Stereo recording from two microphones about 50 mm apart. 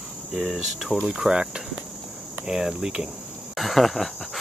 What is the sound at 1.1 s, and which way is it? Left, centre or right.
Cricket, centre.